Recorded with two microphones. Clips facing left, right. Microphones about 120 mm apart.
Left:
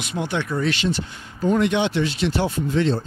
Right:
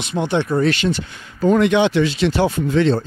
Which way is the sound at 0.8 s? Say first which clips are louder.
Right 3 dB; 80° right.